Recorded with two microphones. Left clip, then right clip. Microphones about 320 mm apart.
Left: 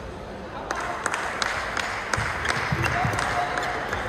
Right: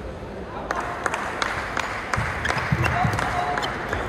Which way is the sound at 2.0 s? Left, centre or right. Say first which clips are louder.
Right 1 dB; right.